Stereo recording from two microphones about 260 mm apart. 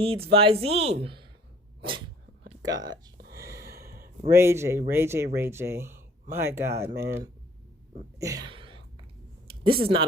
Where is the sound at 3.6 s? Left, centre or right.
Right.